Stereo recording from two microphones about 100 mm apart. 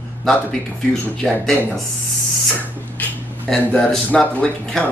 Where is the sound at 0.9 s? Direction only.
5° left (ahead or behind).